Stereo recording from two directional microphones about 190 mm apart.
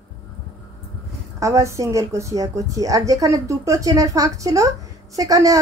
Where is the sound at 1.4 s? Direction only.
15° right (ahead or behind).